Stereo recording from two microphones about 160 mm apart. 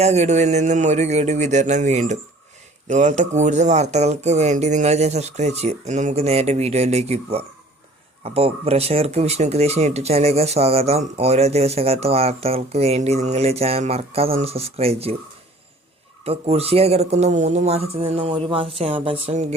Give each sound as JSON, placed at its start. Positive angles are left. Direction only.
{"t": 0.0, "sound": "speech", "side_deg": -45}
{"t": 16.2, "sound": "speech", "side_deg": -40}